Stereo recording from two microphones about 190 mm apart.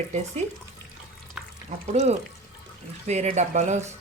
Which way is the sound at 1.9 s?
35° right (ahead or behind).